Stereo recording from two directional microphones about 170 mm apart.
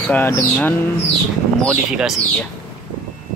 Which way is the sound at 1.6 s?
Centre (ahead or behind).